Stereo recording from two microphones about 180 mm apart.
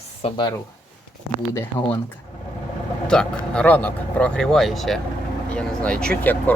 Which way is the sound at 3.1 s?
5° left (ahead or behind).